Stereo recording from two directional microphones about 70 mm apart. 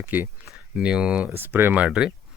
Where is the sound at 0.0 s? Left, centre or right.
Right.